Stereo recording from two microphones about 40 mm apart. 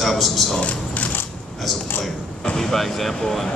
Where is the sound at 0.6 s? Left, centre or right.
Left.